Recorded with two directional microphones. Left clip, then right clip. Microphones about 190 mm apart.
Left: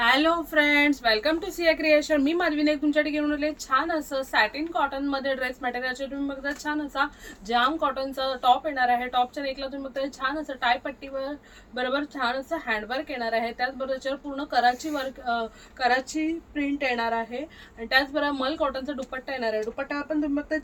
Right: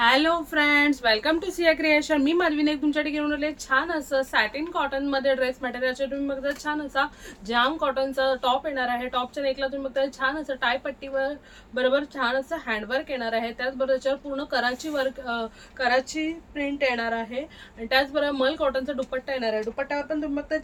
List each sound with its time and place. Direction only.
0.0 s a woman's voice: 15° right (ahead or behind)